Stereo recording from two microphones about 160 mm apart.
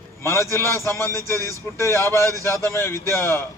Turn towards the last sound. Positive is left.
turn(degrees=15)  # may be behind; listen again after turning